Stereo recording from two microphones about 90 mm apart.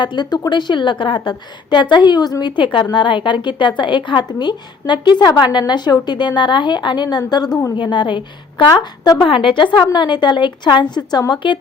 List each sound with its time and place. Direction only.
0.0 s a woman's voice: 55° left (ahead or behind)
2.9 s a woman's voice: 65° left (ahead or behind); by 7.6 s 50° left (ahead or behind)
7.8 s a woman's voice: 65° left (ahead or behind)
9.9 s a woman's voice: 55° left (ahead or behind)